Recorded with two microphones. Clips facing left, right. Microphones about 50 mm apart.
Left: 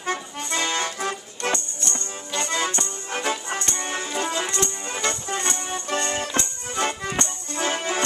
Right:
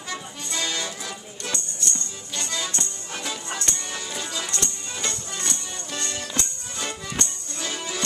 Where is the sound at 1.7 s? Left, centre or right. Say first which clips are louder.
Left 1 dB; left.